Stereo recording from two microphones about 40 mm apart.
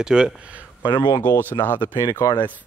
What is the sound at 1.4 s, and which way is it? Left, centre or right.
Speech, left.